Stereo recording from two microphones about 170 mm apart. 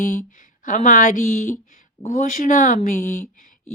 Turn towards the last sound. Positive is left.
turn(degrees=50)  # may be behind; listen again after turning